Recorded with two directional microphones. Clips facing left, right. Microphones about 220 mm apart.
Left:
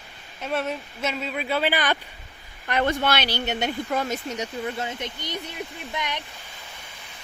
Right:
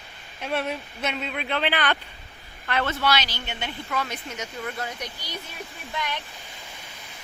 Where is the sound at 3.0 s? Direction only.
55° left (ahead or behind).